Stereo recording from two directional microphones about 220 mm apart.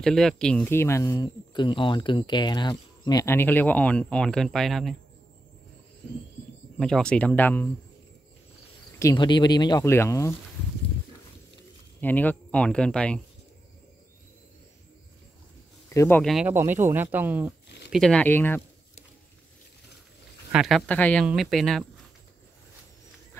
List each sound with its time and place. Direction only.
0.0 s speech: centre (ahead or behind)
6.8 s speech: 5° left (ahead or behind)
9.0 s speech: 20° left (ahead or behind)
12.0 s speech: 10° left (ahead or behind)
15.9 s speech: 10° left (ahead or behind); by 17.6 s 10° right (ahead or behind)
17.9 s speech: 5° left (ahead or behind)
20.5 s speech: centre (ahead or behind)